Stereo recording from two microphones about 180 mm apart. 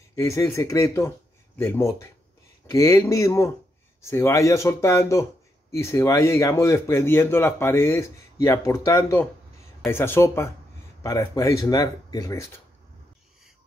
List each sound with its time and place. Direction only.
0.1 s speech: 15° left (ahead or behind)